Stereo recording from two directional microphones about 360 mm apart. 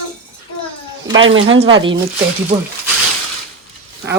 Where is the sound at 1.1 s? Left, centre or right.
Right.